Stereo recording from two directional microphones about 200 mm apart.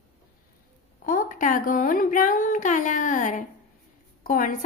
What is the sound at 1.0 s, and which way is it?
Speech, 45° left (ahead or behind).